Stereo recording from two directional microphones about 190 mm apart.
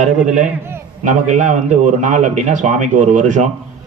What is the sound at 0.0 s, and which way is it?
Speech, 40° right (ahead or behind).